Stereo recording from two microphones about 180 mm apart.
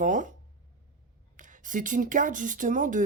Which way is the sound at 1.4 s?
45° right (ahead or behind).